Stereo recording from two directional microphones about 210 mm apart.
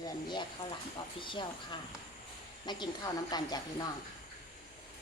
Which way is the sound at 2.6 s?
20° left (ahead or behind).